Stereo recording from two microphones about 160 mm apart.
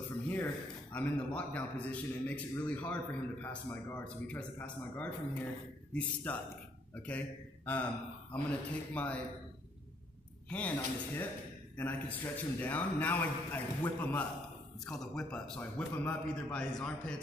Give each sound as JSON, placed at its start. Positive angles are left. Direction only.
{"t": 0.9, "sound": "a man's voice", "side_deg": 10}
{"t": 10.5, "sound": "a man's voice", "side_deg": 10}